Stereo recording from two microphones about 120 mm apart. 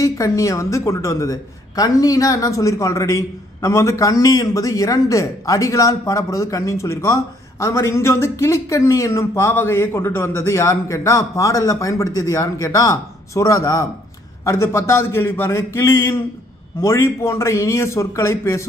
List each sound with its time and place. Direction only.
0.0 s a woman's voice: 25° left (ahead or behind)